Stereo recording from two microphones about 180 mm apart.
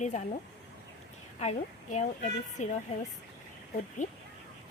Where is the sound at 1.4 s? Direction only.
40° left (ahead or behind).